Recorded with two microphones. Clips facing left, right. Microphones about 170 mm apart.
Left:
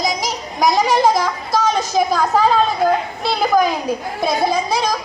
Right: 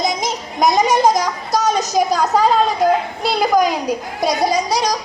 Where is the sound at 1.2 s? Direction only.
15° right (ahead or behind).